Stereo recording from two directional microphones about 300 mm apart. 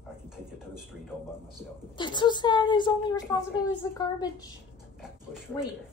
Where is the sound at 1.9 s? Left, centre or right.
Centre.